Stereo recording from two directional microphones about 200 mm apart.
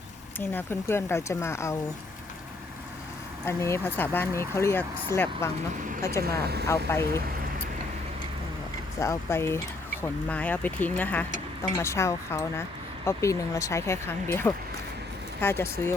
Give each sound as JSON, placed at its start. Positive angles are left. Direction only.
{"t": 0.3, "sound": "speech", "side_deg": 10}
{"t": 3.4, "sound": "speech", "side_deg": 10}
{"t": 6.2, "sound": "speech", "side_deg": -50}
{"t": 6.7, "sound": "speech", "side_deg": 15}
{"t": 9.0, "sound": "speech", "side_deg": 15}